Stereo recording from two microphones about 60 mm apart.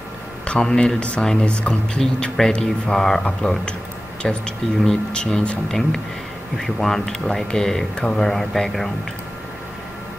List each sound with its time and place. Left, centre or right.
0.5 s speech: centre